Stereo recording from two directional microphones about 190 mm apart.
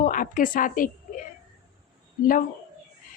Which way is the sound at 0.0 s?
45° left (ahead or behind).